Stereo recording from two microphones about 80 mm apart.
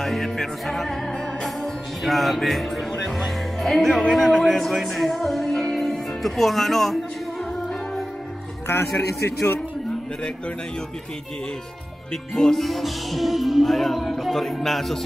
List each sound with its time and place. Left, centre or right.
0.0 s music: centre
9.2 s a man's voice: left
12.1 s music: centre